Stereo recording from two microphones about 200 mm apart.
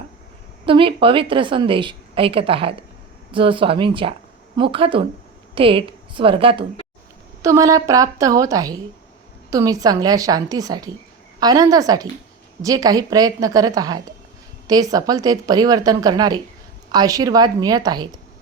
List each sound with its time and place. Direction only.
0.6 s speech: 25° right (ahead or behind)
7.4 s a woman's voice: 15° right (ahead or behind)